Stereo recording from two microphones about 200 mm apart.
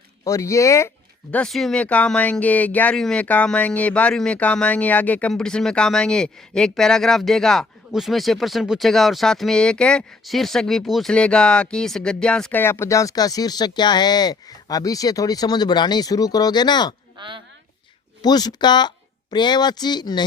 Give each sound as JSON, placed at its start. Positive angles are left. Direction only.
{"t": 0.3, "sound": "speech", "side_deg": 15}
{"t": 1.3, "sound": "speech", "side_deg": 5}
{"t": 17.2, "sound": "speech", "side_deg": -25}
{"t": 18.2, "sound": "speech", "side_deg": 20}